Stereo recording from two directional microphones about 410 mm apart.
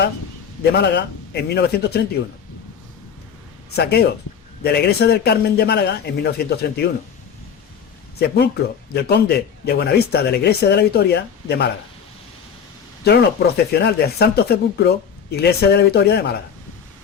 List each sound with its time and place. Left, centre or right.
0.6 s speech: left
3.8 s speech: left
8.2 s speech: left
13.7 s speech: left